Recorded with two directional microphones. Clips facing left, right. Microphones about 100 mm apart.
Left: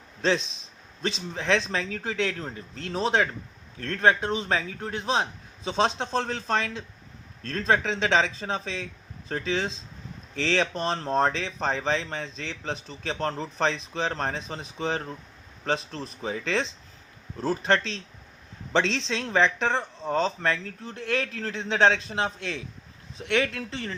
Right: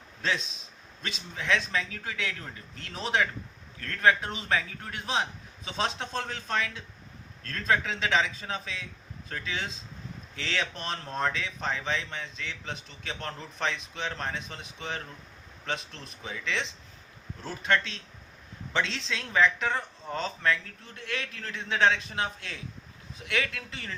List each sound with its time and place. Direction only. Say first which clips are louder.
0.2 s speech: left 6 dB; 30° left (ahead or behind)